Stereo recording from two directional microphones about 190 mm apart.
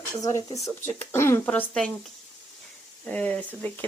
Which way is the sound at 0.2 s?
15° left (ahead or behind).